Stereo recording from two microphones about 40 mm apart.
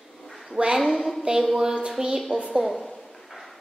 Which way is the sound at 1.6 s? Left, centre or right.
Centre.